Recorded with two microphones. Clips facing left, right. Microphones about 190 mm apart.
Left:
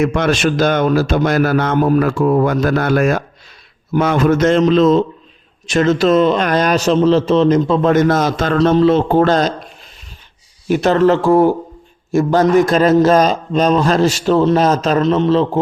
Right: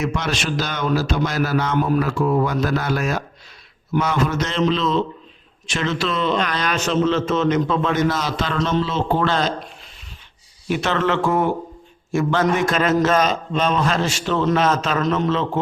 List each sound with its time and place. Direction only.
0.0 s a man's voice: 55° left (ahead or behind)
10.7 s a man's voice: 40° left (ahead or behind)